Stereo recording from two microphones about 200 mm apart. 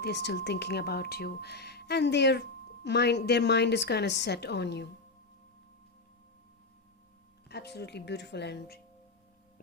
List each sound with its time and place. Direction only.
0.0 s a woman's voice: 55° left (ahead or behind)
7.4 s a woman's voice: 55° left (ahead or behind)